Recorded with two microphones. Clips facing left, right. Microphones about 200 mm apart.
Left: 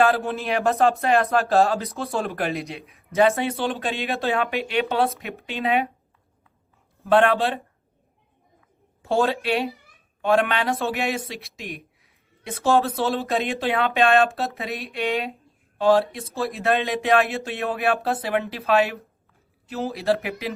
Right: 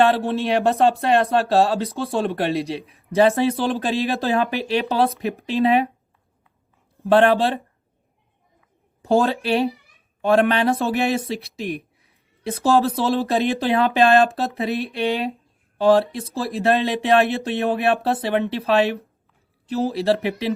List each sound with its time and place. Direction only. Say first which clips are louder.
0.0 s speech: right 3 dB; 30° right (ahead or behind)
7.0 s speech: right 3 dB; 35° right (ahead or behind)
9.0 s speech: right 3 dB; 35° right (ahead or behind)